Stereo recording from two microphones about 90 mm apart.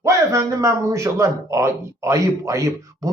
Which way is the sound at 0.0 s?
35° right (ahead or behind).